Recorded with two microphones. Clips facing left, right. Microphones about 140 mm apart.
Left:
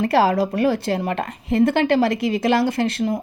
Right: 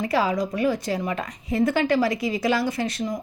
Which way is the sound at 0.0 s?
65° left (ahead or behind).